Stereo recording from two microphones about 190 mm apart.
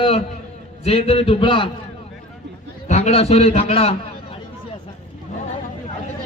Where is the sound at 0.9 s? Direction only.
30° left (ahead or behind).